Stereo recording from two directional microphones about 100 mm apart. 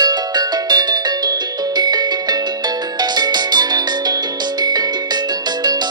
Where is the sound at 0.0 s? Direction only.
45° right (ahead or behind).